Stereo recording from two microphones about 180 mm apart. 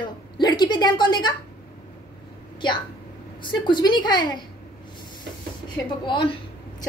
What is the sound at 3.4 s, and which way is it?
A woman's voice, 25° left (ahead or behind).